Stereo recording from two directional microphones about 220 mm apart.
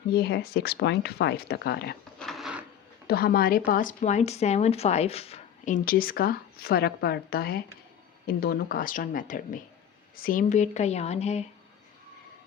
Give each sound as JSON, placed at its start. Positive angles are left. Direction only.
{"t": 0.1, "sound": "speech", "side_deg": 45}
{"t": 2.1, "sound": "a sound", "side_deg": 0}
{"t": 3.1, "sound": "a woman's voice", "side_deg": 45}